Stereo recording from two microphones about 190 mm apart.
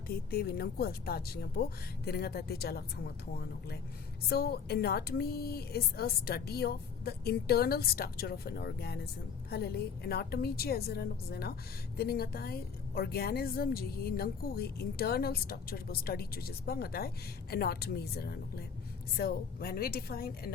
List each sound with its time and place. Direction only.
0.1 s a woman's voice: 55° left (ahead or behind)